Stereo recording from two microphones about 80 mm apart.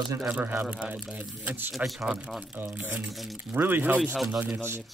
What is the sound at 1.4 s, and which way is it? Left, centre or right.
Speech, right.